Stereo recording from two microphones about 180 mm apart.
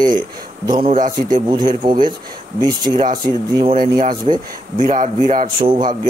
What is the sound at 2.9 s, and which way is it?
Speech, 45° right (ahead or behind).